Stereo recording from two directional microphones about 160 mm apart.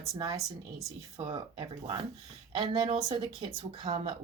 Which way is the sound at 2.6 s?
35° right (ahead or behind).